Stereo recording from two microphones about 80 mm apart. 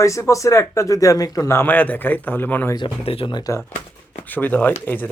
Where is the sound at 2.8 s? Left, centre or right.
Left.